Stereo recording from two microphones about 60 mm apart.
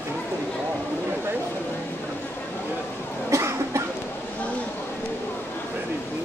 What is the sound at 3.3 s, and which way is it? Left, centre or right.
Cough, right.